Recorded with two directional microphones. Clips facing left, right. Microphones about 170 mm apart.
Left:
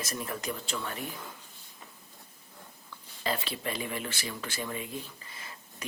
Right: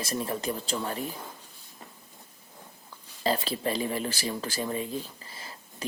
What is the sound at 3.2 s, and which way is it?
Speech, 35° right (ahead or behind).